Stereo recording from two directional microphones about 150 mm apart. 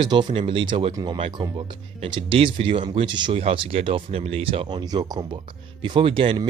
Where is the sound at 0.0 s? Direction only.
30° right (ahead or behind).